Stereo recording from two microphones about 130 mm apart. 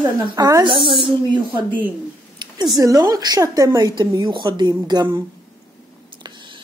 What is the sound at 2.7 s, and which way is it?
A woman's voice, 30° right (ahead or behind).